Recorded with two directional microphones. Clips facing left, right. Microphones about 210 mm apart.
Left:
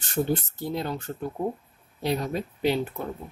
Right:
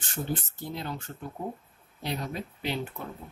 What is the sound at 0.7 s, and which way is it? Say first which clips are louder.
Speech: left 7 dB; 40° left (ahead or behind).